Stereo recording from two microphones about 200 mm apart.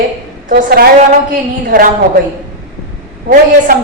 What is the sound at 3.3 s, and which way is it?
Speech, 45° right (ahead or behind).